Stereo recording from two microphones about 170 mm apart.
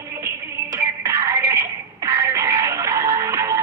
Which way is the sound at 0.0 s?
15° right (ahead or behind).